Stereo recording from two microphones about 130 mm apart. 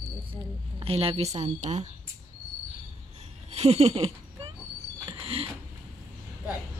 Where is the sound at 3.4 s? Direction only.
55° right (ahead or behind).